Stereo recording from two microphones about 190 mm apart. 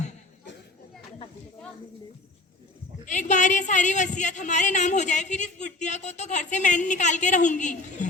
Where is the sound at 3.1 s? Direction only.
40° left (ahead or behind).